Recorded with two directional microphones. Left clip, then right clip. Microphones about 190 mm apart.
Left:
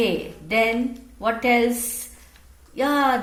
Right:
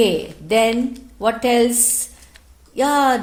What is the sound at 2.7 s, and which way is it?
Speech, 60° right (ahead or behind).